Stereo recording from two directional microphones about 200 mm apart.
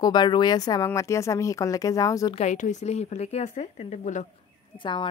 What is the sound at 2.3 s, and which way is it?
A woman's voice, 35° left (ahead or behind).